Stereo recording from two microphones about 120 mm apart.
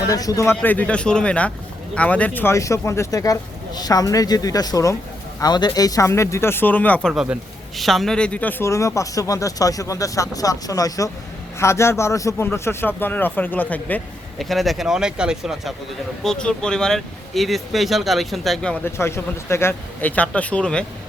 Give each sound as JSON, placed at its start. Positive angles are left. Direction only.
{"t": 0.1, "sound": "speech", "side_deg": 30}
{"t": 0.5, "sound": "speech", "side_deg": 15}
{"t": 7.1, "sound": "speech", "side_deg": -5}
{"t": 14.3, "sound": "speech", "side_deg": 0}
{"t": 16.2, "sound": "speech", "side_deg": 5}
{"t": 18.9, "sound": "speech", "side_deg": 20}